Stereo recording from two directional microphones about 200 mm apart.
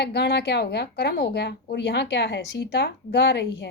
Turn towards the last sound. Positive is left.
turn(degrees=55)  # may be behind; listen again after turning